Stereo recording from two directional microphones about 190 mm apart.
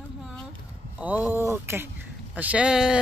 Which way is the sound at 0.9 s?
10° right (ahead or behind).